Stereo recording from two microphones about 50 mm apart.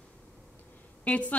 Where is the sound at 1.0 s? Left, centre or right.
Left.